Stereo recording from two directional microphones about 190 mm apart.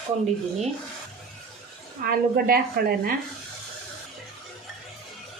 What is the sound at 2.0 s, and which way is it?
A woman's voice, 50° right (ahead or behind).